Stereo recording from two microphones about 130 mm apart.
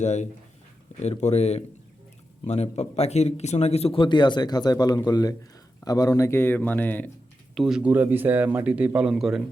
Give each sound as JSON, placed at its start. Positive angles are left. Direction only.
{"t": 0.0, "sound": "a man's voice", "side_deg": 60}
{"t": 7.5, "sound": "speech", "side_deg": -5}